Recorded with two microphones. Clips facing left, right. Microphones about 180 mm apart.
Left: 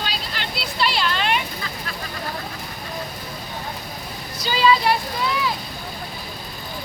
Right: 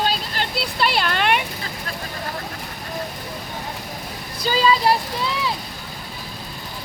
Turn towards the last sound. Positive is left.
turn(degrees=-35)  # may be behind; listen again after turning